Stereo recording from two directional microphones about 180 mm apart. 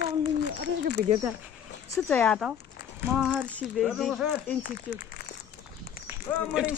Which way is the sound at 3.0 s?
10° right (ahead or behind).